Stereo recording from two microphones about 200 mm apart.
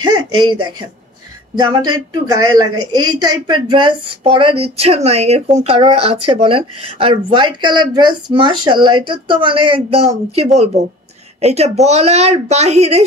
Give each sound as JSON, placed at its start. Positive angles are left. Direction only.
{"t": 0.0, "sound": "speech", "side_deg": -20}
{"t": 3.4, "sound": "speech", "side_deg": -25}